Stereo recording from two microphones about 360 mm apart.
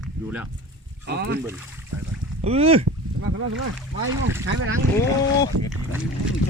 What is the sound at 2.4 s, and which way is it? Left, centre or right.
Speech, centre.